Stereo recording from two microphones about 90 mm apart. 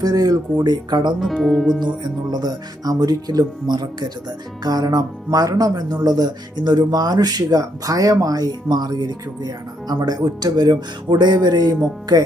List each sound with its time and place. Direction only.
0.0 s speech: 45° right (ahead or behind)
1.2 s speech: centre (ahead or behind)
2.0 s speech: 50° right (ahead or behind)